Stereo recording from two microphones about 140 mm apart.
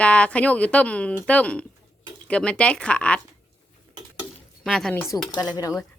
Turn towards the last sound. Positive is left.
turn(degrees=30)  # may be behind; listen again after turning